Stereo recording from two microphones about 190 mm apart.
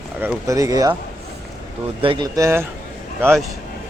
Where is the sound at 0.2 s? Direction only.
15° right (ahead or behind).